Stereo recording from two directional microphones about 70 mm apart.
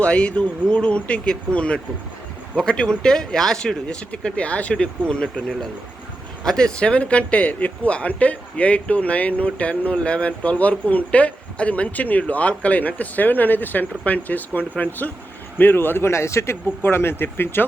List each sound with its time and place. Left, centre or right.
0.0 s speech: centre
6.4 s speech: centre; by 17.7 s left